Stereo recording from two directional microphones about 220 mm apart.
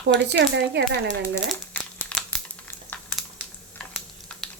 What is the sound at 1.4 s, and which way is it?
Crumpling, 5° left (ahead or behind).